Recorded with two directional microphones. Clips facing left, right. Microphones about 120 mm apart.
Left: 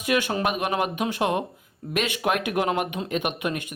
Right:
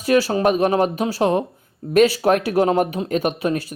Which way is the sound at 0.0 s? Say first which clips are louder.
Right 7 dB; 35° right (ahead or behind).